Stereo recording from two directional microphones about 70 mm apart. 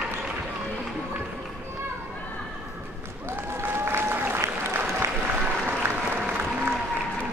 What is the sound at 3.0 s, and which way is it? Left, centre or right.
Applause, right.